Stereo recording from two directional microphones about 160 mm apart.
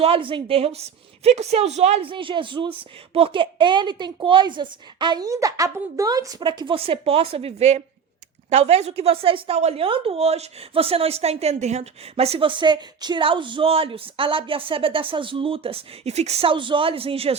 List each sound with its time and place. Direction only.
0.0 s speech: 35° right (ahead or behind)